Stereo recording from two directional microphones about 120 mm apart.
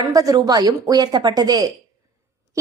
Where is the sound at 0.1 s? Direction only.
30° right (ahead or behind).